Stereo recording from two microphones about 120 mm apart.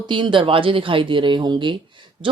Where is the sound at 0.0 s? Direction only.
40° right (ahead or behind).